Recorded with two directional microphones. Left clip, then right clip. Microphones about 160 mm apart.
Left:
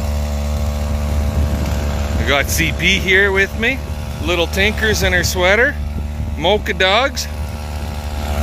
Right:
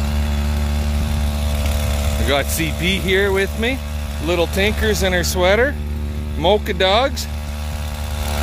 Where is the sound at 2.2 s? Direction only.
5° right (ahead or behind).